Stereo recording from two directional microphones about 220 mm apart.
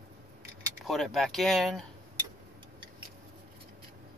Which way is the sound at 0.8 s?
Centre (ahead or behind).